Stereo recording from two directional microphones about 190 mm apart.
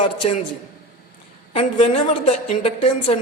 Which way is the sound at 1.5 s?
30° left (ahead or behind).